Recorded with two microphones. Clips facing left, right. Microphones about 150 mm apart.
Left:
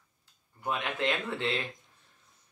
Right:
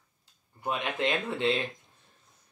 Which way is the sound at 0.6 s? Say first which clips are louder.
Right 1 dB; 20° right (ahead or behind).